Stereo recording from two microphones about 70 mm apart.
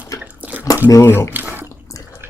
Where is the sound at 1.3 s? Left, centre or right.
Right.